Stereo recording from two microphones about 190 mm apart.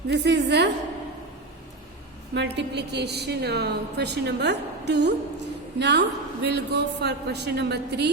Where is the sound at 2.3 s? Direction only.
65° right (ahead or behind).